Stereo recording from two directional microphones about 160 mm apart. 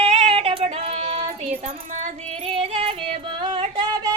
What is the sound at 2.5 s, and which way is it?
Music, 35° right (ahead or behind).